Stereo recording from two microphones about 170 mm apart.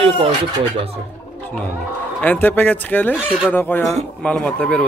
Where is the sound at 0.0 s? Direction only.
35° right (ahead or behind).